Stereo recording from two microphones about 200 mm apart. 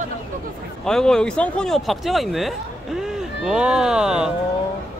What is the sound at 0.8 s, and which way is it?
Speech, 5° left (ahead or behind).